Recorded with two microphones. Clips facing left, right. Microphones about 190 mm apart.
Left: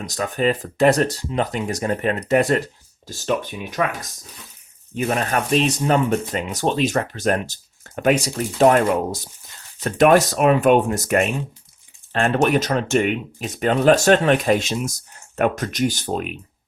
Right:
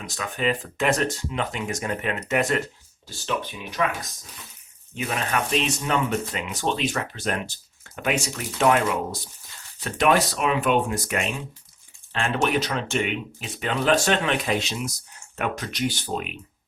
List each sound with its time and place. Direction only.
0.0 s speech: 40° left (ahead or behind)
3.1 s speech: 45° left (ahead or behind)
4.9 s speech: 45° left (ahead or behind)